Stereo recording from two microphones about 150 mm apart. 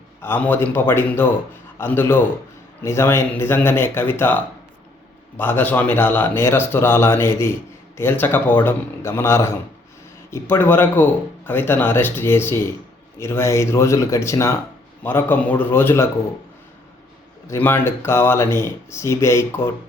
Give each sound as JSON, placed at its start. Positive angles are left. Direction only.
{"t": 0.2, "sound": "speech", "side_deg": 15}
{"t": 17.5, "sound": "speech", "side_deg": 15}